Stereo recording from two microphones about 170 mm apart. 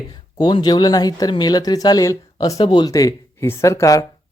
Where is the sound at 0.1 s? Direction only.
25° left (ahead or behind).